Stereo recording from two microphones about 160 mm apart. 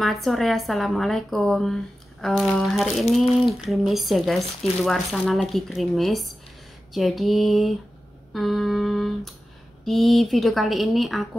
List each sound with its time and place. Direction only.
0.0 s speech: centre (ahead or behind)